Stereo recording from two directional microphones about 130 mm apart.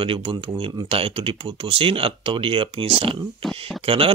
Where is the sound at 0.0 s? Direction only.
45° right (ahead or behind).